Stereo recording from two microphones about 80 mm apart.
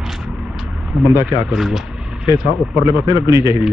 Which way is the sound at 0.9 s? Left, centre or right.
Centre.